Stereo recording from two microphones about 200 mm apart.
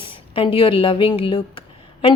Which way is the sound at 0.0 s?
25° left (ahead or behind).